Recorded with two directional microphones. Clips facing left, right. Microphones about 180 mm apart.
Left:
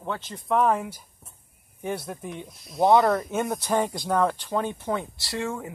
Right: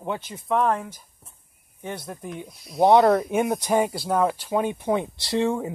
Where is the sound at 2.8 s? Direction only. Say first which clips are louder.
Right 3 dB; 20° right (ahead or behind).